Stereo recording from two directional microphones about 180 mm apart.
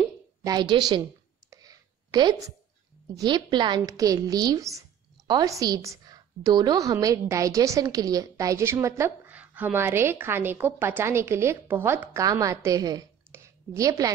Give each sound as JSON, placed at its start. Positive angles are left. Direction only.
{"t": 0.5, "sound": "a woman's voice", "side_deg": -25}
{"t": 1.5, "sound": "a sound", "side_deg": -20}
{"t": 3.2, "sound": "a woman's voice", "side_deg": -25}